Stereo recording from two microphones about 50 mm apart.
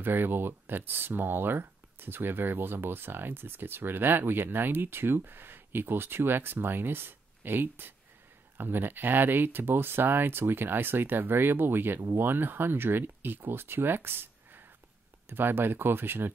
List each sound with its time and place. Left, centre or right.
0.0 s speech: right